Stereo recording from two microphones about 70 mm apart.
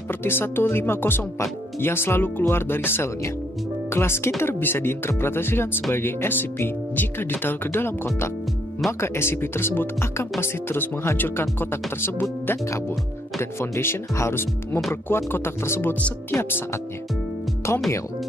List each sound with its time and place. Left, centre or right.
0.1 s speech: left